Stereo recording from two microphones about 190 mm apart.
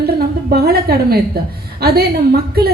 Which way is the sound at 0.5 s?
55° right (ahead or behind).